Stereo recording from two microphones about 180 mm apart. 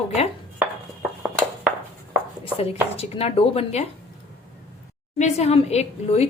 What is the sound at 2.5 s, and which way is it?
Speech, 35° left (ahead or behind).